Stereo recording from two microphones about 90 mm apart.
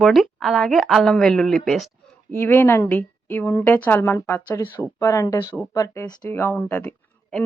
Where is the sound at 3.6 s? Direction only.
20° left (ahead or behind); by 5.6 s 40° left (ahead or behind).